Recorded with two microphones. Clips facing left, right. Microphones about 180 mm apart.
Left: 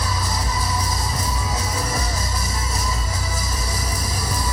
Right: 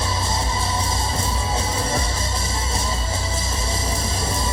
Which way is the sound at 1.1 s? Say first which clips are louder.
Right 1 dB; 25° right (ahead or behind).